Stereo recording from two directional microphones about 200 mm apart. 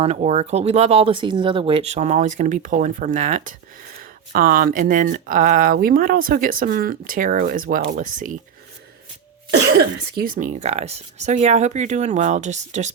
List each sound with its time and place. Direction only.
0.0 s speech: 35° right (ahead or behind)
10.2 s speech: 45° right (ahead or behind)